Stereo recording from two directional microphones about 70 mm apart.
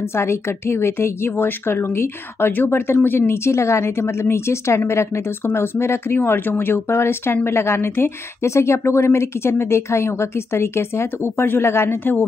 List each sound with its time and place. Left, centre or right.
0.1 s a woman's voice: left